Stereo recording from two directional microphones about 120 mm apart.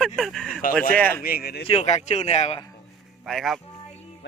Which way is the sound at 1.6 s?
60° left (ahead or behind).